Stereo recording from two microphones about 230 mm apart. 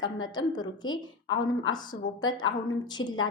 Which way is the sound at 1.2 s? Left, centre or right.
Left.